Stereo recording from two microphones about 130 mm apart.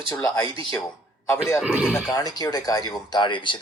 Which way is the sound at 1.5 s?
5° right (ahead or behind).